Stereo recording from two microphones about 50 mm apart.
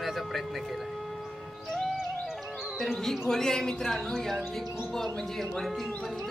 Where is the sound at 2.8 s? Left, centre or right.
Centre.